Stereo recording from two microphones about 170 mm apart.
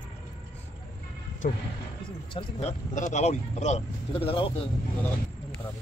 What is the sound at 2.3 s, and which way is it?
Speech, 40° left (ahead or behind).